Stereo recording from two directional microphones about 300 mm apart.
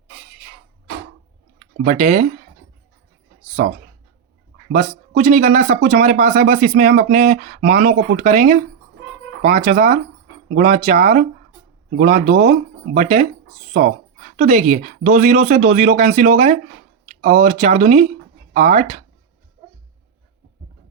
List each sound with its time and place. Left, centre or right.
1.8 s speech: right
3.6 s speech: right
14.3 s speech: right